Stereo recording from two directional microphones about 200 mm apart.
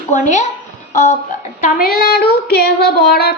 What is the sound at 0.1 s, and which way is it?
Speech, 35° left (ahead or behind).